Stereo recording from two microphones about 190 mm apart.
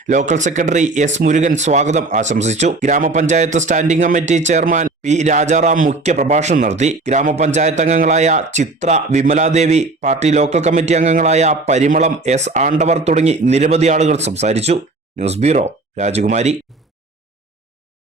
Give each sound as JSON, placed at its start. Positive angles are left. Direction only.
{"t": 0.1, "sound": "speech", "side_deg": -40}